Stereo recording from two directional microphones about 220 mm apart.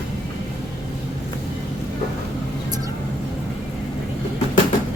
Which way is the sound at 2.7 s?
15° right (ahead or behind).